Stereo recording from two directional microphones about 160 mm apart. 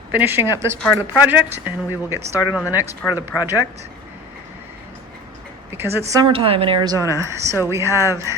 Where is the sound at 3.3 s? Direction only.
20° left (ahead or behind).